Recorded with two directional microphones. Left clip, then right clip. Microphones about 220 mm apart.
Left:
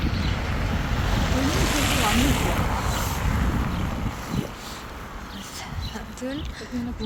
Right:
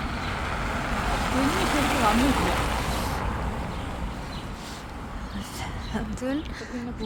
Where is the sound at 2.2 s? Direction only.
25° right (ahead or behind).